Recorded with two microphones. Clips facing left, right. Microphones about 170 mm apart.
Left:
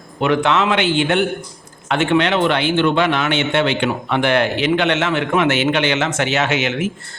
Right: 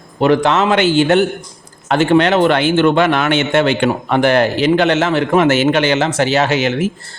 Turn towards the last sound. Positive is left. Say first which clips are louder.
# right 4 dB
turn(degrees=-35)  # may be behind; listen again after turning